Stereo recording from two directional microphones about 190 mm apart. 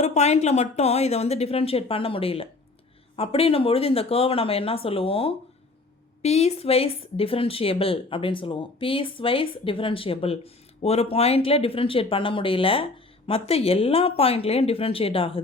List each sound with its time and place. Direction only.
0.0 s speech: 35° left (ahead or behind)